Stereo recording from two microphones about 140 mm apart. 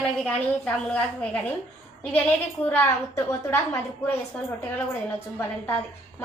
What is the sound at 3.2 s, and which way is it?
Speech, 20° left (ahead or behind).